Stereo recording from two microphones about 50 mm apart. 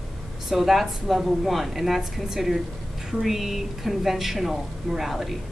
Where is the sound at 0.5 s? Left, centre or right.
Centre.